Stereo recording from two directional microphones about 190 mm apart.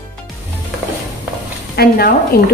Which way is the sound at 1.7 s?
55° left (ahead or behind).